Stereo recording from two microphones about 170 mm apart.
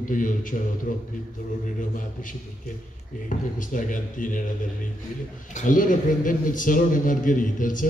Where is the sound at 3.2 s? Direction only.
50° left (ahead or behind).